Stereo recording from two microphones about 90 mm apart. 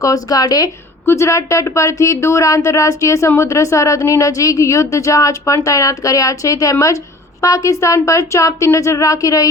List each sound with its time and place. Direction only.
0.0 s speech: 40° left (ahead or behind)
1.0 s speech: 30° left (ahead or behind)